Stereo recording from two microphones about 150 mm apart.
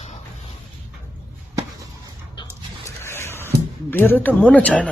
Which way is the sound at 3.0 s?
15° left (ahead or behind).